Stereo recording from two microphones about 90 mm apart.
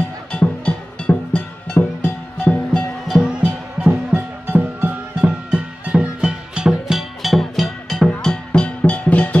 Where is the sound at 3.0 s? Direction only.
5° right (ahead or behind).